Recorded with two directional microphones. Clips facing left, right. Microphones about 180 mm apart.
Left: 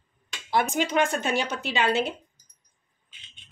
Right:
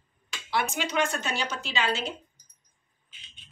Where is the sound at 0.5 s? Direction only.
50° left (ahead or behind).